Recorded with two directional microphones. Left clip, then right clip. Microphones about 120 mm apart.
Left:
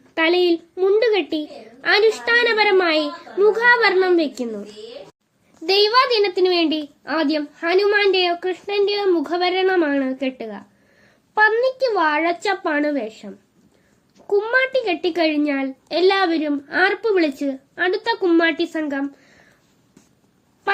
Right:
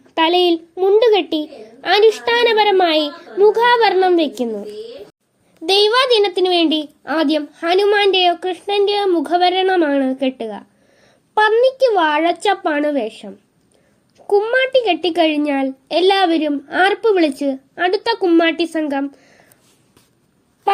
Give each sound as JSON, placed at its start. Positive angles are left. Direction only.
{"t": 0.1, "sound": "a child's voice", "side_deg": -25}
{"t": 5.6, "sound": "a child's voice", "side_deg": -25}
{"t": 14.3, "sound": "a child's voice", "side_deg": -30}